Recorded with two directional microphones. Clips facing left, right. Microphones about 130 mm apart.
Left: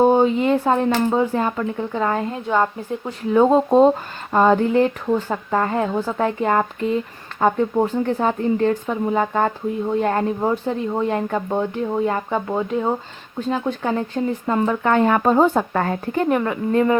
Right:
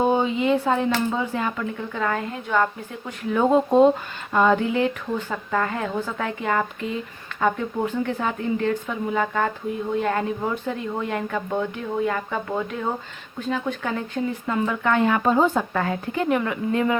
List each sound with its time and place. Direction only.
0.0 s speech: 45° left (ahead or behind)